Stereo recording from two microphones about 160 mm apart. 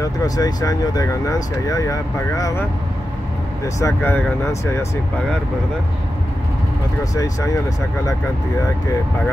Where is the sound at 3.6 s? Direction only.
15° left (ahead or behind).